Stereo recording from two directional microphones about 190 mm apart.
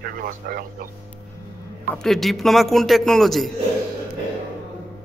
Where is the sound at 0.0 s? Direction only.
50° right (ahead or behind).